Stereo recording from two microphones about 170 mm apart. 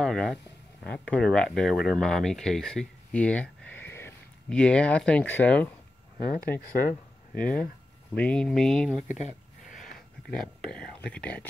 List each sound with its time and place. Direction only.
0.0 s speech: centre (ahead or behind)
6.6 s speech: 55° left (ahead or behind)
7.3 s speech: 5° left (ahead or behind)
9.9 s a sound: 5° left (ahead or behind)
11.1 s speech: 5° left (ahead or behind)